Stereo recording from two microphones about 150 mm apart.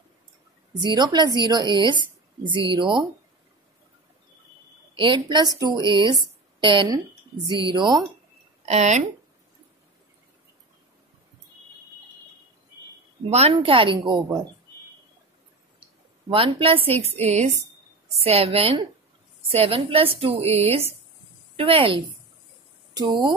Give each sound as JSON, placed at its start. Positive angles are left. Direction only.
{"t": 0.7, "sound": "a woman's voice", "side_deg": -30}
{"t": 4.9, "sound": "a woman's voice", "side_deg": -35}
{"t": 8.6, "sound": "speech", "side_deg": -50}
{"t": 13.3, "sound": "a woman's voice", "side_deg": -40}
{"t": 16.3, "sound": "a woman's voice", "side_deg": -35}